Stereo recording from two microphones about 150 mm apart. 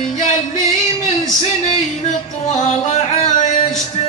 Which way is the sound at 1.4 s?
50° left (ahead or behind).